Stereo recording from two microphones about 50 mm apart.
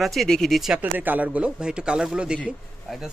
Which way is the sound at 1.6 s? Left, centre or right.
Centre.